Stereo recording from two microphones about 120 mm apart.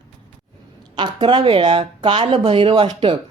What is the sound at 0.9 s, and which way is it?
Speech, 40° right (ahead or behind).